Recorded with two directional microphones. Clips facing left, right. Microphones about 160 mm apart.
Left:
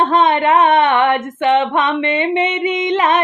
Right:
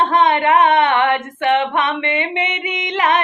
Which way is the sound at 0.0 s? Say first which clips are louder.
Left 1 dB; 20° left (ahead or behind).